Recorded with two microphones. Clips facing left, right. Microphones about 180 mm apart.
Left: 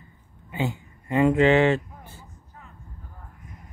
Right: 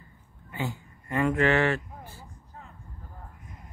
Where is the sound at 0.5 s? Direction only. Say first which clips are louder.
Left 5 dB; 20° left (ahead or behind).